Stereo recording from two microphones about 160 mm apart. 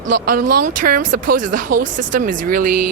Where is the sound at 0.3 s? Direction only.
60° right (ahead or behind).